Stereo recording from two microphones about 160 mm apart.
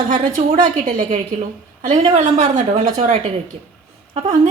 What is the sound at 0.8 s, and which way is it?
Speech, 45° right (ahead or behind).